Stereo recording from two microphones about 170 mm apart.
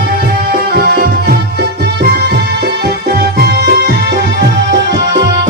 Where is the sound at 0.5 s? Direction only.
65° right (ahead or behind).